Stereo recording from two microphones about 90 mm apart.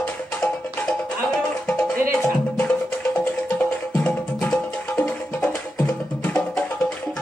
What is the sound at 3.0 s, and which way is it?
Music, 15° left (ahead or behind).